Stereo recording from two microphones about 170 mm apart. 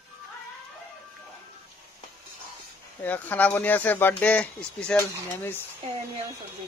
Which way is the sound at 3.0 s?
10° left (ahead or behind).